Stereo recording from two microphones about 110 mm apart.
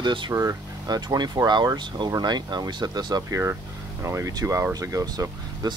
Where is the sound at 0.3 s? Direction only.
30° right (ahead or behind).